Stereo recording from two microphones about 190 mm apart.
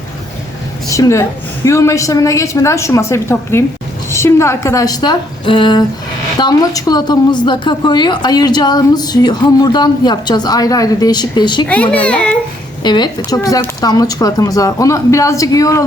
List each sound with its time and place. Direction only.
0.9 s a woman's voice: 15° left (ahead or behind)
11.7 s a woman's voice: 10° left (ahead or behind)
12.8 s a woman's voice: 25° left (ahead or behind)